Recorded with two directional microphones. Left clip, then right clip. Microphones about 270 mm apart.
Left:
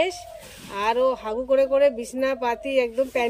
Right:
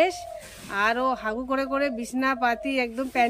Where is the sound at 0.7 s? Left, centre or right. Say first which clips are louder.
Left 2 dB; centre.